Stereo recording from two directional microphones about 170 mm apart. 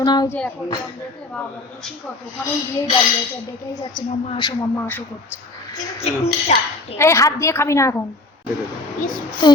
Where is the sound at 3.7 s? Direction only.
25° left (ahead or behind).